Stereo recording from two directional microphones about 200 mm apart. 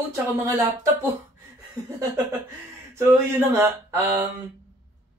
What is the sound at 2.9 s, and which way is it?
Speech, 10° right (ahead or behind).